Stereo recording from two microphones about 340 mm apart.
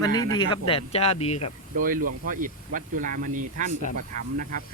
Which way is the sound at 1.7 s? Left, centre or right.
Right.